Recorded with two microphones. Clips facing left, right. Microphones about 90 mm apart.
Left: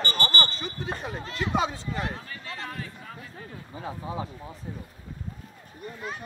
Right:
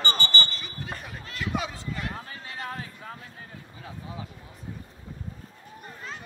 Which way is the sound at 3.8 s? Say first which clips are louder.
Left 7 dB; 35° left (ahead or behind).